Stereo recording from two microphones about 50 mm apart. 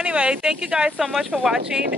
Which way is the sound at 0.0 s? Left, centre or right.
Right.